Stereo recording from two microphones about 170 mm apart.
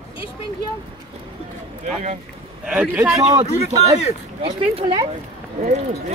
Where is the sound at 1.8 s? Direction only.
40° right (ahead or behind).